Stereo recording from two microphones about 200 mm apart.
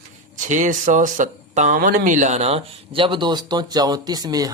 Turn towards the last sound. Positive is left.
turn(degrees=-20)  # may be behind; listen again after turning